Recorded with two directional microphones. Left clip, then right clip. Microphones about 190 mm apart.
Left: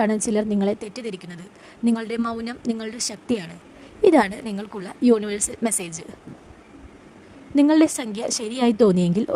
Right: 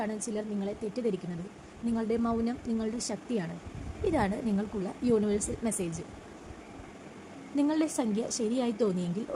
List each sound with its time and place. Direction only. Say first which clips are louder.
0.0 s a woman's voice: left 13 dB; 50° left (ahead or behind)
7.5 s a woman's voice: left 12 dB; 45° left (ahead or behind)